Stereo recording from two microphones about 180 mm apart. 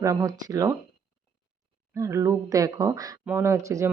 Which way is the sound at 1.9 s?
15° right (ahead or behind).